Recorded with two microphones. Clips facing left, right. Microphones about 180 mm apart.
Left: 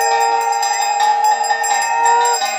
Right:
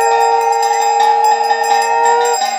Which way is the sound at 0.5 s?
45° right (ahead or behind).